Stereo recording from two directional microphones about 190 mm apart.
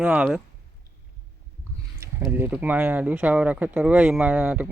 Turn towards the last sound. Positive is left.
turn(degrees=-5)  # may be behind; listen again after turning